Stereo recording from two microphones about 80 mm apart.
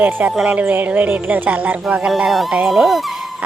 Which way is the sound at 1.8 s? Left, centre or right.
Centre.